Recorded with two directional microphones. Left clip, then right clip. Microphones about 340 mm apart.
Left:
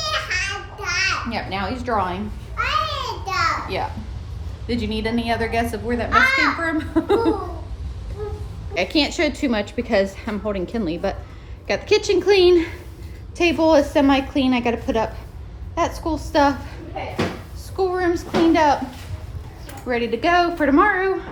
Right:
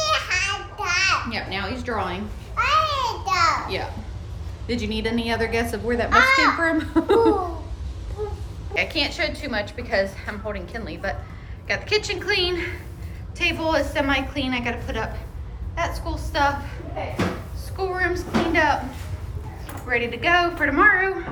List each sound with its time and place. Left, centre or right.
0.0 s babbling: centre
1.3 s a woman's voice: centre
2.6 s a sound: centre
4.6 s a woman's voice: centre
6.1 s a child's voice: right
6.6 s a woman's voice: centre
8.7 s a woman's voice: centre
17.7 s a woman's voice: centre
19.9 s a woman's voice: centre